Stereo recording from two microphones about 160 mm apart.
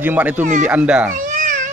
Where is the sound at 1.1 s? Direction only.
50° right (ahead or behind).